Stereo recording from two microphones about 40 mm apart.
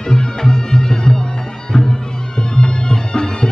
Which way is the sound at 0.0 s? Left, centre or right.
Centre.